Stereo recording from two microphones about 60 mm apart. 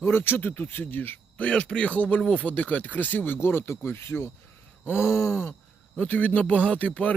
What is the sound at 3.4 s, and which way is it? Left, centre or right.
Speech, left.